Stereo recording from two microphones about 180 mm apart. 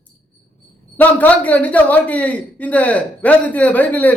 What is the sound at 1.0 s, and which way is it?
A woman's voice, 10° left (ahead or behind).